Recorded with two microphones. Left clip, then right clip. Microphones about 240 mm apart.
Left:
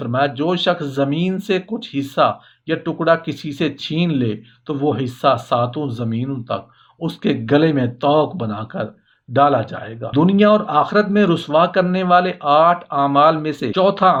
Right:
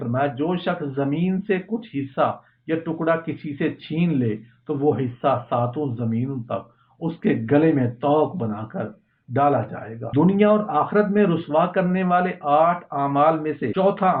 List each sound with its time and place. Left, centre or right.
0.0 s speech: left